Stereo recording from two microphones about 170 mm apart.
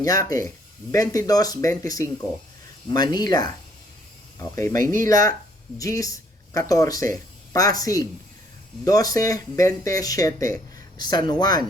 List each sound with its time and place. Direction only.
0.0 s speech: 20° left (ahead or behind)